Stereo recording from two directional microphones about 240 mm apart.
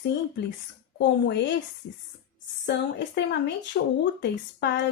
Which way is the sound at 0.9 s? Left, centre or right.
Left.